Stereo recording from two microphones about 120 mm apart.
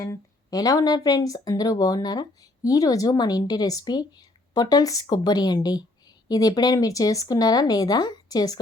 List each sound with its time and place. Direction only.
0.0 s speech: 30° left (ahead or behind)